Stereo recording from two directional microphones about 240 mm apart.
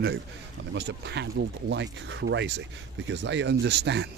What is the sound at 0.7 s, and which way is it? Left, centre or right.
Speech, right.